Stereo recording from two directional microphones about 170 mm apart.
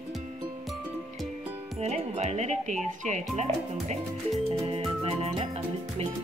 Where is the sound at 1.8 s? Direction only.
40° right (ahead or behind).